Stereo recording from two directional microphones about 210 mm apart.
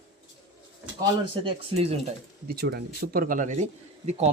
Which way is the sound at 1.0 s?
25° right (ahead or behind).